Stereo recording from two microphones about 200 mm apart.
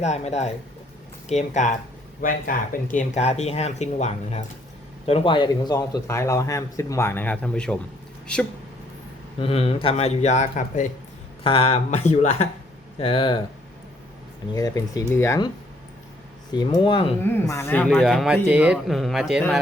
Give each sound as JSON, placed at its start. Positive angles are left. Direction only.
{"t": 0.0, "sound": "a man's voice", "side_deg": 35}
{"t": 9.4, "sound": "speech", "side_deg": 30}
{"t": 11.4, "sound": "speech", "side_deg": 30}
{"t": 14.5, "sound": "a man's voice", "side_deg": 20}
{"t": 16.5, "sound": "speech", "side_deg": 20}
{"t": 17.2, "sound": "speech", "side_deg": 10}